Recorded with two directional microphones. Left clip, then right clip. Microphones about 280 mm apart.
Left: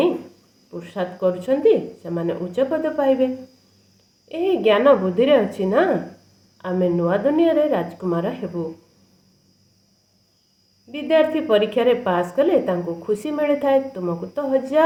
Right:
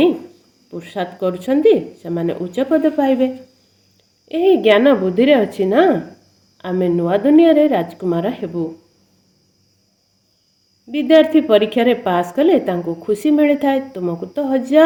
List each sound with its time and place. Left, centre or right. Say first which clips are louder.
0.7 s a woman's voice: right 3 dB; right
4.3 s a woman's voice: right 6 dB; right
10.9 s a woman's voice: right 6 dB; right